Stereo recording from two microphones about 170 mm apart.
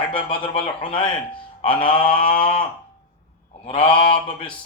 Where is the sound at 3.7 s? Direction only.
30° left (ahead or behind).